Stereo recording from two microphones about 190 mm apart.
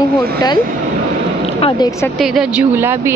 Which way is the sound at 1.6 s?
30° left (ahead or behind).